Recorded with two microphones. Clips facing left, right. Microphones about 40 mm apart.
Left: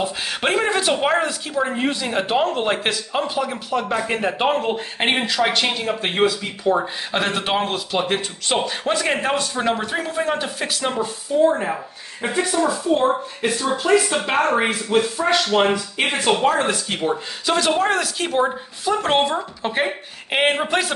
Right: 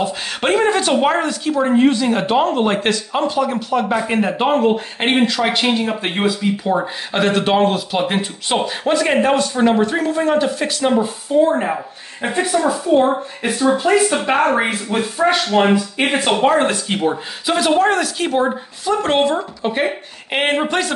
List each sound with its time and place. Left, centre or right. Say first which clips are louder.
0.0 s speech: right 3 dB; centre
11.3 s speech: right 4 dB; right
12.4 s speech: right 3 dB; right
14.3 s speech: right 2 dB; centre
15.1 s speech: right 3 dB; right
16.3 s speech: right 3 dB; right; by 20.9 s centre